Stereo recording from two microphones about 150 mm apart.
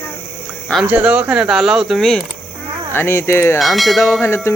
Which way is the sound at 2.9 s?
15° left (ahead or behind).